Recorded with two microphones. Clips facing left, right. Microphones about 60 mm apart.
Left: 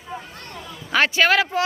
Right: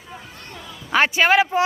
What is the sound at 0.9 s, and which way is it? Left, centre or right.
Speech, centre.